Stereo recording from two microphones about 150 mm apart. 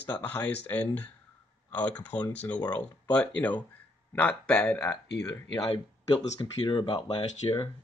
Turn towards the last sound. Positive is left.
turn(degrees=25)  # may be behind; listen again after turning